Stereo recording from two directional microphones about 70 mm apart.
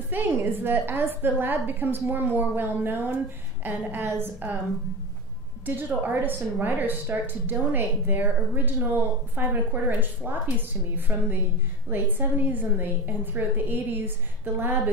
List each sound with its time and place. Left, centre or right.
0.1 s a woman's voice: right
5.7 s a woman's voice: right